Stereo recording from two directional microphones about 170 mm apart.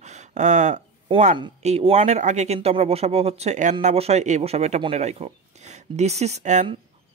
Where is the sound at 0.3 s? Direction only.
45° right (ahead or behind).